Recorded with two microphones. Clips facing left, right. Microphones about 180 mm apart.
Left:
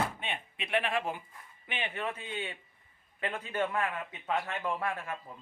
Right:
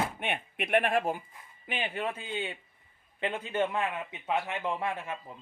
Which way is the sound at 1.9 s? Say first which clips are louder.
Right 3 dB; 30° right (ahead or behind).